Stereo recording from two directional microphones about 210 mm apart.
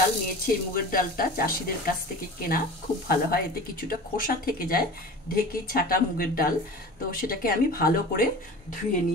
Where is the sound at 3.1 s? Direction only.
45° left (ahead or behind).